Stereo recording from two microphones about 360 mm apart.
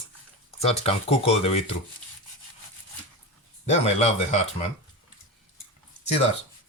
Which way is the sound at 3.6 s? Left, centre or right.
Centre.